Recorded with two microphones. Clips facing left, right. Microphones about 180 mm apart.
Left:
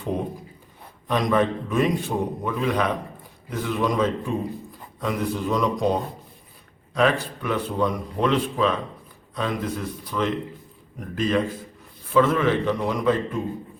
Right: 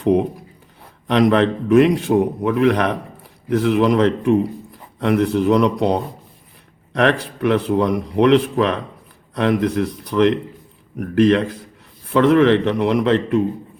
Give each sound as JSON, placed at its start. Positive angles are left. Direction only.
{"t": 1.0, "sound": "a man's voice", "side_deg": -75}